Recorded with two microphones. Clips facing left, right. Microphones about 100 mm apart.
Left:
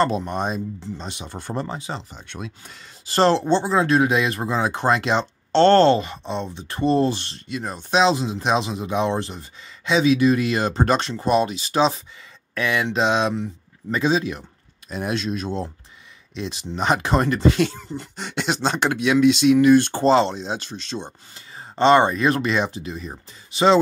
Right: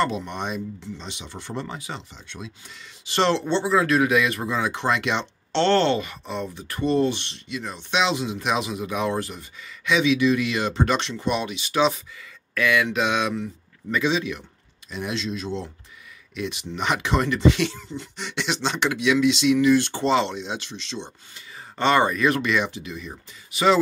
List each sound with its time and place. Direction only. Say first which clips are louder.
0.0 s speech: left 4 dB; 40° left (ahead or behind)
2.1 s speech: left 4 dB; 55° left (ahead or behind)
3.1 s speech: left 4 dB; 35° left (ahead or behind)
16.3 s speech: left 2 dB; 30° left (ahead or behind)
21.5 s speech: left 5 dB; 30° left (ahead or behind)